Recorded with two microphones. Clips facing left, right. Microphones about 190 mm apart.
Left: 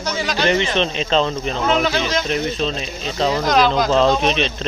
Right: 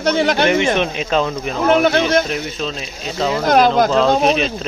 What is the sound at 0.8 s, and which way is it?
Speech, 10° right (ahead or behind).